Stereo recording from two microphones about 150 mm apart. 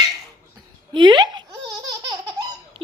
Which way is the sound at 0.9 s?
30° right (ahead or behind).